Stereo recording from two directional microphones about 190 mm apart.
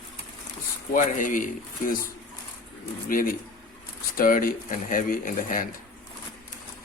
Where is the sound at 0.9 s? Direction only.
45° left (ahead or behind).